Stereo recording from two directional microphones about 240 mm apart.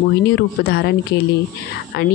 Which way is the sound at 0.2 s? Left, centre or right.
Left.